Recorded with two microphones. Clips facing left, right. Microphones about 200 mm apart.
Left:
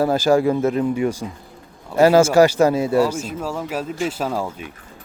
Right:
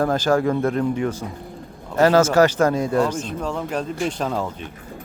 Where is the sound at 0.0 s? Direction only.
10° left (ahead or behind).